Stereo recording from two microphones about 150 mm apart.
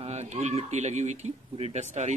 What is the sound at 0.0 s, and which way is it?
Speech, 45° right (ahead or behind).